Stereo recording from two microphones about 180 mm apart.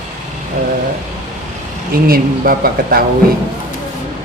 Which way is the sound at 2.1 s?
55° right (ahead or behind).